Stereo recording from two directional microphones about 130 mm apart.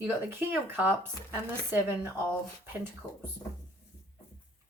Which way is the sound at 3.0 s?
35° left (ahead or behind).